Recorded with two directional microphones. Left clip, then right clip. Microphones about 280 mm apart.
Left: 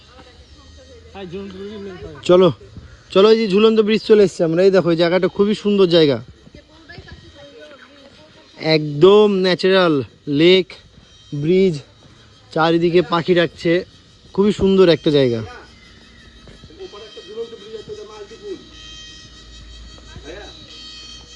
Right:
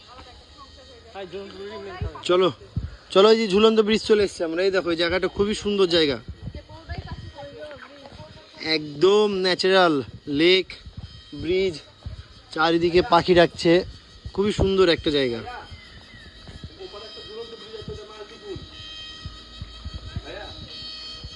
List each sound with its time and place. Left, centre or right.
1.1 s speech: left
2.2 s speech: centre
4.2 s speech: centre
8.5 s speech: centre
11.4 s speech: centre
12.5 s speech: centre
14.3 s speech: centre
17.7 s a sound: right
18.8 s music: right